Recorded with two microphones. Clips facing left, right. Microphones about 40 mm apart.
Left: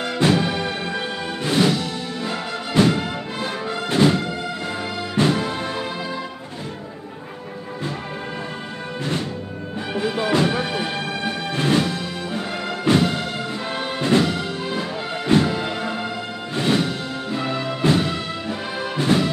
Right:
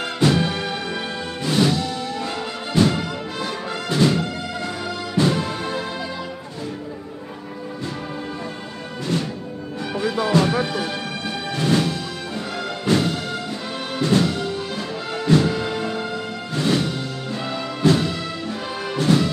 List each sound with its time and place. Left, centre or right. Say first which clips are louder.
0.0 s music: even; left
5.4 s music: even; left
10.3 s music: right 1 dB; left
19.1 s music: right 1 dB; left